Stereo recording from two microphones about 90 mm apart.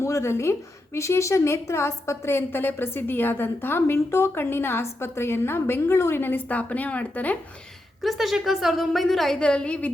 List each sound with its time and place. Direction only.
0.0 s a woman's voice: 30° left (ahead or behind); by 7.3 s 15° left (ahead or behind)
8.0 s a woman's voice: centre (ahead or behind)